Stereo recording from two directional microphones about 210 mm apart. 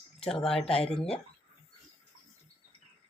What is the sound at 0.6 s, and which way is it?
Speech, 30° left (ahead or behind).